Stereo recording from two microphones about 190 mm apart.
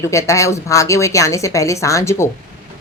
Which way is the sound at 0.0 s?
15° left (ahead or behind).